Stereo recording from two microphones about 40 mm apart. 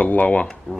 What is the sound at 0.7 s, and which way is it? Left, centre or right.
Speech, left.